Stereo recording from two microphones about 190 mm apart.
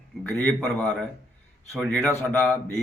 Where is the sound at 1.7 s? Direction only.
Centre (ahead or behind).